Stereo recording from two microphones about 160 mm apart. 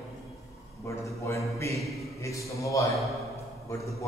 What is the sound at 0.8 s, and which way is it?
A man's voice, 20° left (ahead or behind).